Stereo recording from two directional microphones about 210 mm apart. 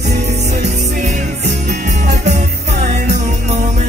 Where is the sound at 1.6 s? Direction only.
35° right (ahead or behind).